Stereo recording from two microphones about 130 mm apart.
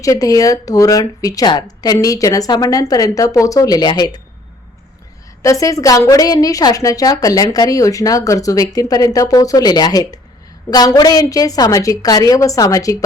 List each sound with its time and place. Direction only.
0.0 s a woman's voice: 25° left (ahead or behind)
5.4 s a woman's voice: 25° left (ahead or behind)